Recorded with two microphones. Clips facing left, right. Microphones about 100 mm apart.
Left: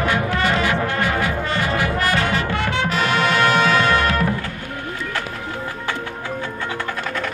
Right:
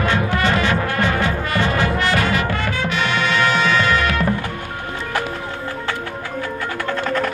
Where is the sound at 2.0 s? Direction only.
35° left (ahead or behind).